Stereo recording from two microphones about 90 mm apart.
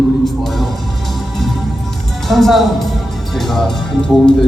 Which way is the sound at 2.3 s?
Centre (ahead or behind).